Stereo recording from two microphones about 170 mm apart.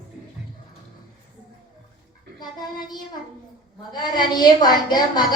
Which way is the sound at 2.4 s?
25° left (ahead or behind).